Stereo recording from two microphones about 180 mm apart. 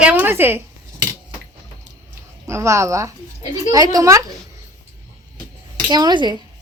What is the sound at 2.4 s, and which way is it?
A woman's voice, 15° right (ahead or behind).